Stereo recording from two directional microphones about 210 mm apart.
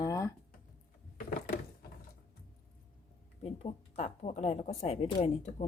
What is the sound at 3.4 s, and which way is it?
Speech, 30° left (ahead or behind).